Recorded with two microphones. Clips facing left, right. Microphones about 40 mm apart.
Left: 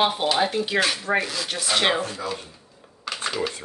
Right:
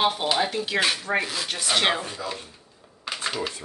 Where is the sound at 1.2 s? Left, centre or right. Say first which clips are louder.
Left 1 dB; centre.